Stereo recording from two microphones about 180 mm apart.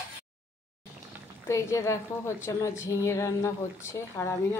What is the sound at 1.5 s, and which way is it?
A woman's voice, 15° left (ahead or behind).